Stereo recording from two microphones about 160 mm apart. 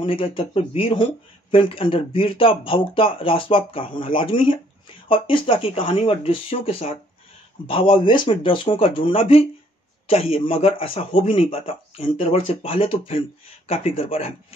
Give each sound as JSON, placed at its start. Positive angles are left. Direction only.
{"t": 0.0, "sound": "speech", "side_deg": 30}